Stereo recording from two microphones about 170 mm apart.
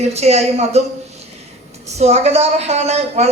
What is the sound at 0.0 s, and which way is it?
Speech, 40° right (ahead or behind).